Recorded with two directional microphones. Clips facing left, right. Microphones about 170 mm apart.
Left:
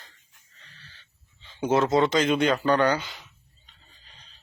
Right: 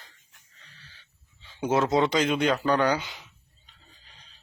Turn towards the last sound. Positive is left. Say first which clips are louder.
# left 1 dB
turn(degrees=-10)  # may be behind; listen again after turning